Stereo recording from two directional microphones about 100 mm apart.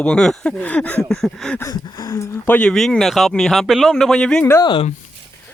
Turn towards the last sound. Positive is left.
turn(degrees=55)  # may be behind; listen again after turning